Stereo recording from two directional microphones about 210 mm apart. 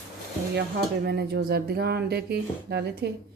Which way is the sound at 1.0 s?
50° right (ahead or behind).